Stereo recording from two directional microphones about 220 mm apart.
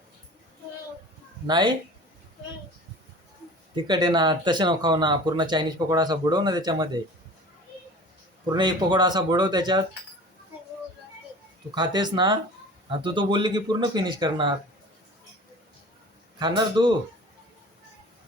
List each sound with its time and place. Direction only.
1.5 s speech: 20° right (ahead or behind)
3.8 s speech: 20° right (ahead or behind)
8.5 s speech: 20° right (ahead or behind)
11.7 s speech: 20° right (ahead or behind)
16.4 s speech: 20° right (ahead or behind)